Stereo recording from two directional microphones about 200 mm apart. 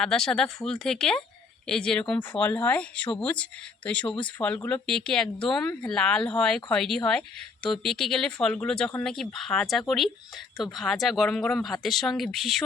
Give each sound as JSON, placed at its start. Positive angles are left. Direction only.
{"t": 0.0, "sound": "speech", "side_deg": 0}
{"t": 4.0, "sound": "speech", "side_deg": 25}
{"t": 4.4, "sound": "speech", "side_deg": 5}